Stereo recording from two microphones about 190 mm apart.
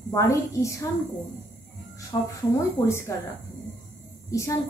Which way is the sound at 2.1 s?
20° left (ahead or behind).